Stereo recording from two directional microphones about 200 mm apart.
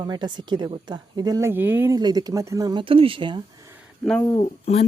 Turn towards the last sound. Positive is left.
turn(degrees=30)  # may be behind; listen again after turning